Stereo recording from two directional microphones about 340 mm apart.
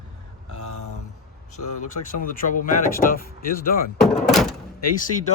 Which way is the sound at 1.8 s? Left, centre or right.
Left.